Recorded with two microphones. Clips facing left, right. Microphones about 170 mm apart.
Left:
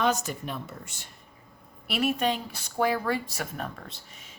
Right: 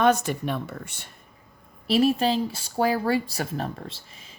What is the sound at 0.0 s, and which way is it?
Speech, 60° right (ahead or behind).